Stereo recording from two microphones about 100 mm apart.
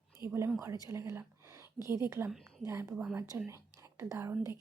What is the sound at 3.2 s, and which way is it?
Speech, 30° right (ahead or behind).